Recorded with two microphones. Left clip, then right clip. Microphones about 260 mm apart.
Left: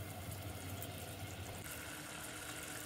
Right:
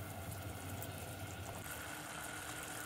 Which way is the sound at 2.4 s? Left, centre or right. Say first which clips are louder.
Right 1 dB; right.